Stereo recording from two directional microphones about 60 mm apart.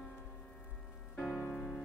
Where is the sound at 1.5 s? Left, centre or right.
Centre.